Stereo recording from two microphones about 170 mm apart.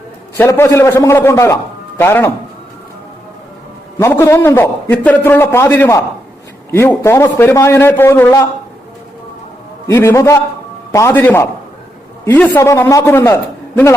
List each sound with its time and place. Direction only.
0.3 s a man's voice: 15° left (ahead or behind)
3.9 s a man's voice: 15° left (ahead or behind)
9.8 s a man's voice: 15° left (ahead or behind)